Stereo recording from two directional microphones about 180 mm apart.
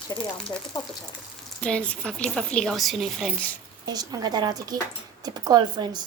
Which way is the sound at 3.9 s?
20° right (ahead or behind).